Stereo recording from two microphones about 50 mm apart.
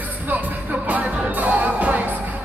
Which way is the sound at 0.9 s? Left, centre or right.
Right.